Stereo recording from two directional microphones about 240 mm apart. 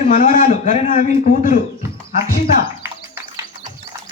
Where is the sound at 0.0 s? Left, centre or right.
Left.